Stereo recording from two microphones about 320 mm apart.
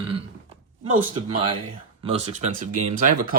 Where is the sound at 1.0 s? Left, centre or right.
Centre.